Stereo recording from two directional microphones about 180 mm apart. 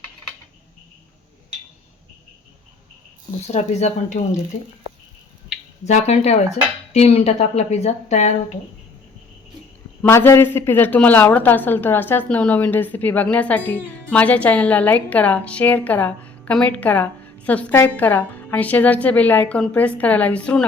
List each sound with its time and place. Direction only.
3.4 s a woman's voice: 40° left (ahead or behind)
5.8 s a woman's voice: 40° left (ahead or behind)
10.0 s a woman's voice: 15° left (ahead or behind)